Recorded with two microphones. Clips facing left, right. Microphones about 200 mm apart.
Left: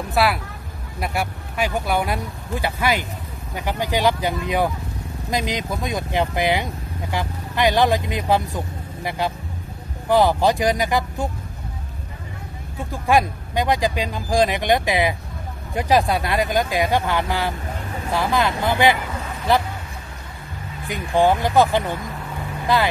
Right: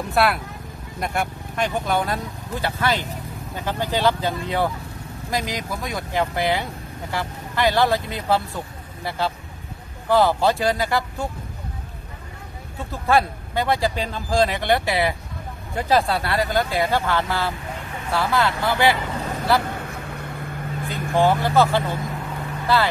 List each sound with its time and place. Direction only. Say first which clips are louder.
0.1 s speech: even; centre (ahead or behind); by 11.2 s 15° left (ahead or behind)
12.9 s speech: left 1 dB; 15° left (ahead or behind)
20.8 s speech: left 2 dB; 15° left (ahead or behind)